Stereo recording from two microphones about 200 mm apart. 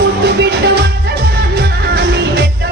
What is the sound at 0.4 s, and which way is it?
Music, 55° right (ahead or behind).